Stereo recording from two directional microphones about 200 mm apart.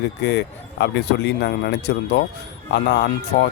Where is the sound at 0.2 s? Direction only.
60° left (ahead or behind).